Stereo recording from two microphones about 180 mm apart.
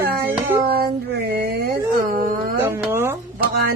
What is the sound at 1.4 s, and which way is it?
Speech, 55° right (ahead or behind).